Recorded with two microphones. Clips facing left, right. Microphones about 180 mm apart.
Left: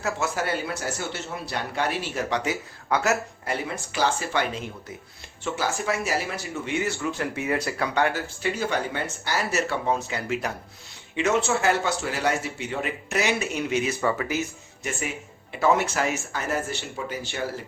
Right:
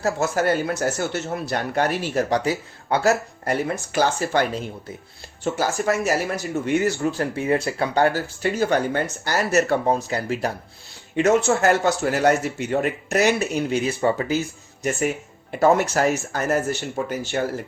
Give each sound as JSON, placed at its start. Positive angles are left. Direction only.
{"t": 0.0, "sound": "speech", "side_deg": -40}
{"t": 15.5, "sound": "speech", "side_deg": -45}